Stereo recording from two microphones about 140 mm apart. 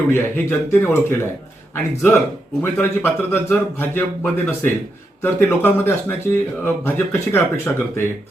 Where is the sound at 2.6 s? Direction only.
15° left (ahead or behind).